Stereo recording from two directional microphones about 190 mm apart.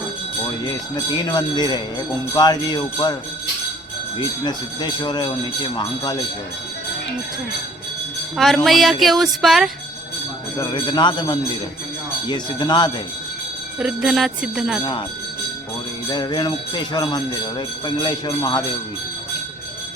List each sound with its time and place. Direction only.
0.4 s speech: 20° left (ahead or behind)
4.4 s speech: 20° left (ahead or behind)
8.4 s speech: centre (ahead or behind)
10.6 s speech: 25° left (ahead or behind)
13.7 s speech: centre (ahead or behind)
16.0 s speech: 20° left (ahead or behind)